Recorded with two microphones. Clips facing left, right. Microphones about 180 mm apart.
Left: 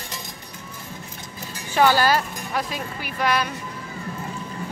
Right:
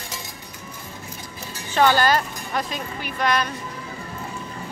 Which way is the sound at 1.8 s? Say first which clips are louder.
Even; 5° left (ahead or behind).